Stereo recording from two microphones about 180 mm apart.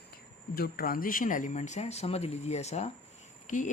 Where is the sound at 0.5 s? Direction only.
55° left (ahead or behind).